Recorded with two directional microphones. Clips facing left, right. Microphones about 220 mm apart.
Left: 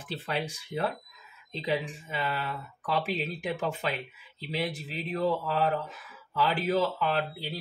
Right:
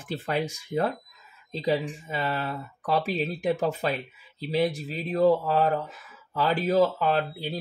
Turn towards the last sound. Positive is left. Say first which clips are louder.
# right 4 dB
turn(degrees=-45)  # may be behind; listen again after turning